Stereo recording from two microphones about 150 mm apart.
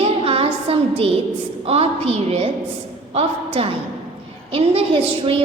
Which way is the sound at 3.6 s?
40° right (ahead or behind).